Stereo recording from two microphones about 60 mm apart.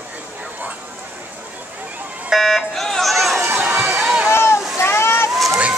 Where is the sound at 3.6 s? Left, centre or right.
Centre.